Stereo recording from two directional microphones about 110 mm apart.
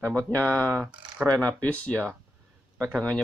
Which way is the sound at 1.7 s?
10° left (ahead or behind).